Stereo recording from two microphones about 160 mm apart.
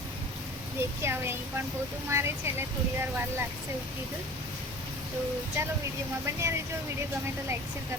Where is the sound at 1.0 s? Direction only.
15° right (ahead or behind).